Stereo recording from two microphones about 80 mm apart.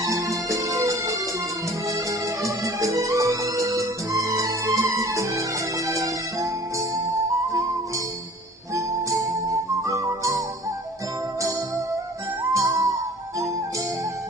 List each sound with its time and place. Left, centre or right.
0.0 s music: right
8.7 s music: right
12.5 s music: right